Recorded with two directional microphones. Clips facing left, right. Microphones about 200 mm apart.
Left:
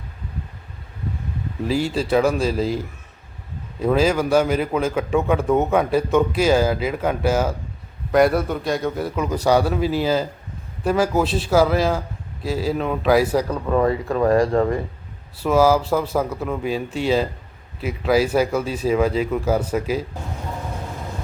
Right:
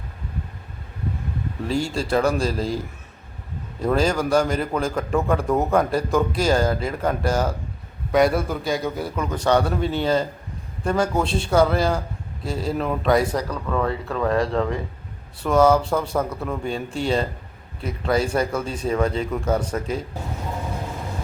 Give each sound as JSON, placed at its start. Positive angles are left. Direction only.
{"t": 1.6, "sound": "a man's voice", "side_deg": 0}
{"t": 13.5, "sound": "speech", "side_deg": 20}
{"t": 13.8, "sound": "speech", "side_deg": 5}
{"t": 15.4, "sound": "a man's voice", "side_deg": 5}